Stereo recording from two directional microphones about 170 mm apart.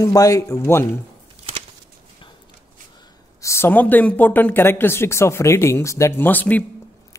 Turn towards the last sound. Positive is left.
turn(degrees=10)  # may be behind; listen again after turning